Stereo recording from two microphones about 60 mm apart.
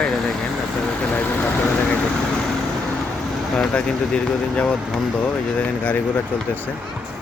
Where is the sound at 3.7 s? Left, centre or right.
Left.